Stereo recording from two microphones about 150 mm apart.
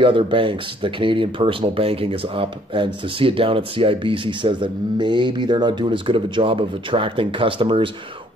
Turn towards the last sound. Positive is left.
turn(degrees=-35)  # may be behind; listen again after turning